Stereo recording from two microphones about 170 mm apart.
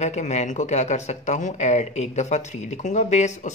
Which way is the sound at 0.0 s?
40° left (ahead or behind).